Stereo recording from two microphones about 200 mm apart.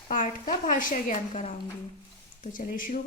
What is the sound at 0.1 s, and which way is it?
A woman's voice, 40° left (ahead or behind).